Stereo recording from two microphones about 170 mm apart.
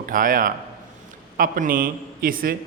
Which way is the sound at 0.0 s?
55° right (ahead or behind).